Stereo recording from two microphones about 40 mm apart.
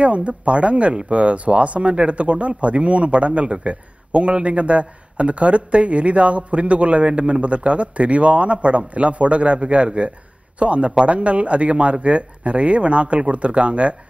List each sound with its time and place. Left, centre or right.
0.0 s a man's voice: right